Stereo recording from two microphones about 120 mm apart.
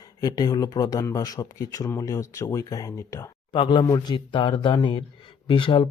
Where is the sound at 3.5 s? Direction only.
45° left (ahead or behind).